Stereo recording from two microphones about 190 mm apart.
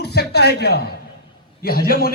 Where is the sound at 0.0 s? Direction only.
55° left (ahead or behind).